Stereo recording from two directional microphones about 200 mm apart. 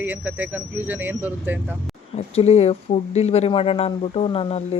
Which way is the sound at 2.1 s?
30° left (ahead or behind).